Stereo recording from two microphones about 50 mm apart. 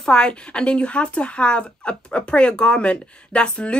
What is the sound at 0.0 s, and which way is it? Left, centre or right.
Speech, centre.